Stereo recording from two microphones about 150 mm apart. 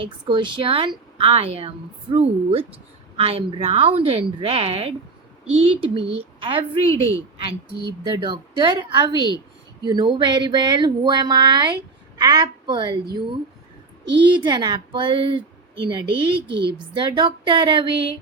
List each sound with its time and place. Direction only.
0.0 s a woman's voice: 30° right (ahead or behind)
6.8 s a woman's voice: 20° left (ahead or behind)
8.0 s a woman's voice: 30° right (ahead or behind)
14.3 s a woman's voice: 30° right (ahead or behind)